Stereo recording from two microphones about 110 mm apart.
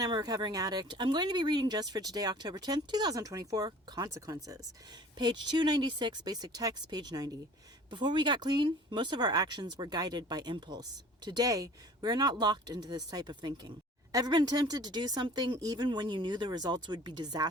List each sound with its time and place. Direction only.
0.0 s speech: 35° right (ahead or behind)